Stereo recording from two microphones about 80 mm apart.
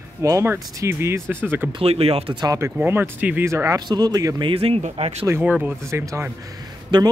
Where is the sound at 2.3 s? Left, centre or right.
Right.